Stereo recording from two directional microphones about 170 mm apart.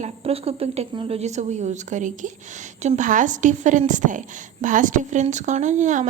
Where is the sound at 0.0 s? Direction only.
35° right (ahead or behind).